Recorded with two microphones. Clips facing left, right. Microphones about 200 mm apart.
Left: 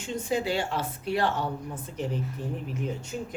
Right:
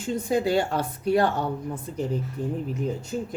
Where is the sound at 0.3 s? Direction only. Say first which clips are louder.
Right 5 dB; 40° right (ahead or behind).